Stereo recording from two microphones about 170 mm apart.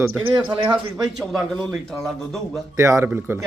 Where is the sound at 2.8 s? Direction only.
15° right (ahead or behind).